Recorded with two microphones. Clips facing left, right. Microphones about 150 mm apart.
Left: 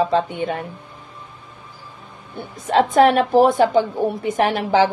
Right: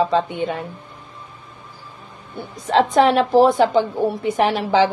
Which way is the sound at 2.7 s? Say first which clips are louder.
Left 1 dB; 50° left (ahead or behind).